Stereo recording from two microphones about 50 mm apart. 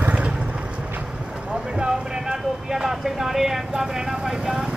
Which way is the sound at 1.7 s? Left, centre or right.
Centre.